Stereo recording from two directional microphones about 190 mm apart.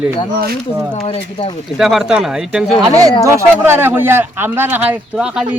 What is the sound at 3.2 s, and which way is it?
Speech, 15° right (ahead or behind).